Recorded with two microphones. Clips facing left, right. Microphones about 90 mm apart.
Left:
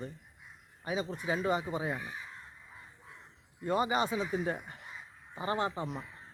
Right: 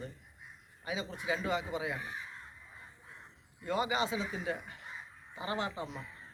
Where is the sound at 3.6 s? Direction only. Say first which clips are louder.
Left 3 dB; 40° left (ahead or behind).